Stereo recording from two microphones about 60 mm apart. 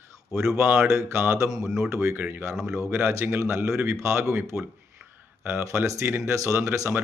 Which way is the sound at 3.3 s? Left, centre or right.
Right.